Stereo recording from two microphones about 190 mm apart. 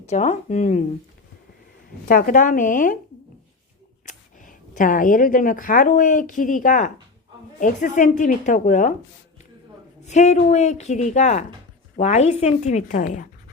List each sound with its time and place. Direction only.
0.0 s speech: 40° left (ahead or behind)
2.0 s speech: 45° left (ahead or behind)
4.0 s speech: 45° left (ahead or behind)
10.0 s speech: 35° left (ahead or behind)